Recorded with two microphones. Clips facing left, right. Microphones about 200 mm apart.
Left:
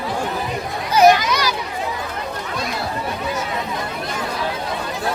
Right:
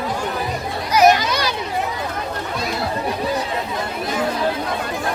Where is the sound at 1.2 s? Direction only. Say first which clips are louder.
Left 1 dB; 30° right (ahead or behind).